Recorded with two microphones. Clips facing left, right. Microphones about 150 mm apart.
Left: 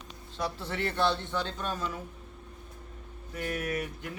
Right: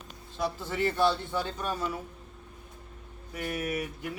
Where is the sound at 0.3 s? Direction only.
Centre (ahead or behind).